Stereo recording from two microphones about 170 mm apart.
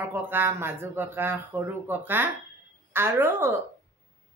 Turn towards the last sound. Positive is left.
turn(degrees=-15)  # may be behind; listen again after turning